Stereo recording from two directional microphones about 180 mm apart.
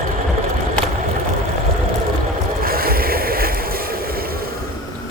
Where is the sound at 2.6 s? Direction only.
55° right (ahead or behind).